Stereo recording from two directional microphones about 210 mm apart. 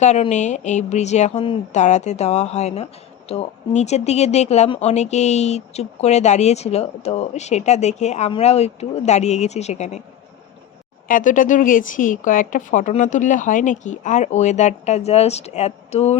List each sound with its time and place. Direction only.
0.0 s speech: 35° left (ahead or behind)
11.1 s speech: 40° left (ahead or behind)